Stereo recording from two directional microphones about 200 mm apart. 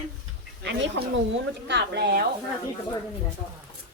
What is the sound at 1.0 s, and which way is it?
A woman's voice, 60° right (ahead or behind).